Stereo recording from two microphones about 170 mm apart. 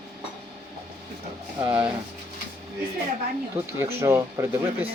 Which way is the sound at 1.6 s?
10° right (ahead or behind).